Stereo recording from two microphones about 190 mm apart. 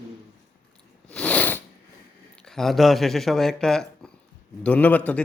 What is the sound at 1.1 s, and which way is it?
Sniff, 5° left (ahead or behind).